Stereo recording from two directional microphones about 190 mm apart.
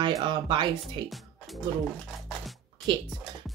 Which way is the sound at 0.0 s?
25° right (ahead or behind).